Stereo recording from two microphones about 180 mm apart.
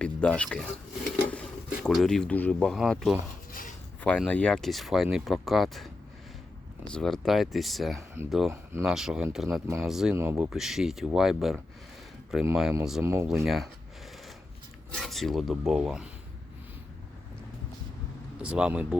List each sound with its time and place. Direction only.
0.0 s speech: 5° left (ahead or behind)
3.5 s a sound: 50° left (ahead or behind)
4.0 s speech: 5° left (ahead or behind)
6.9 s speech: centre (ahead or behind)
14.9 s speech: centre (ahead or behind)
18.4 s speech: 5° right (ahead or behind)